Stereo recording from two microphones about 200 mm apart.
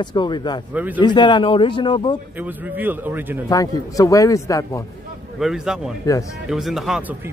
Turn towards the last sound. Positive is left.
turn(degrees=0)  # may be behind; listen again after turning